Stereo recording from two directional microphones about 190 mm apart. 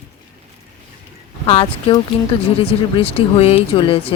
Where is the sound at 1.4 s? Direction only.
30° left (ahead or behind).